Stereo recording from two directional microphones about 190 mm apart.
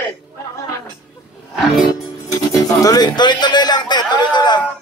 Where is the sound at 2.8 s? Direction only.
20° left (ahead or behind).